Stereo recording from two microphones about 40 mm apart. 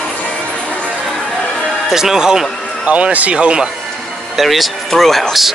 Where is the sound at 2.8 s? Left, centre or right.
Right.